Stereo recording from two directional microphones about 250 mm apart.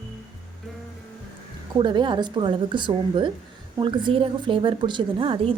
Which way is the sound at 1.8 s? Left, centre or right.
Centre.